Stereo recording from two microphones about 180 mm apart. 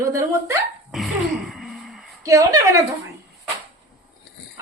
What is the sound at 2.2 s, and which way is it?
Speech, 20° right (ahead or behind).